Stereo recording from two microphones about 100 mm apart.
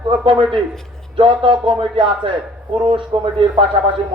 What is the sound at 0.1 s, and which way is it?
A man's voice, 60° right (ahead or behind).